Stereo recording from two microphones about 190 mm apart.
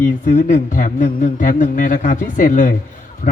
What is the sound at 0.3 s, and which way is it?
Speech, 40° left (ahead or behind).